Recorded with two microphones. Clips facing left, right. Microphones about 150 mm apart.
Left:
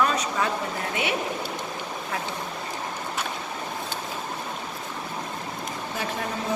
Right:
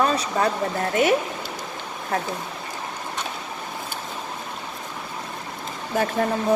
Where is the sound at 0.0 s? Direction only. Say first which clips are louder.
Right 3 dB; 35° right (ahead or behind).